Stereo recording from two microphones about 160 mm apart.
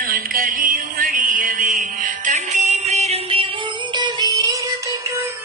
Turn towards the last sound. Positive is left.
turn(degrees=-25)  # may be behind; listen again after turning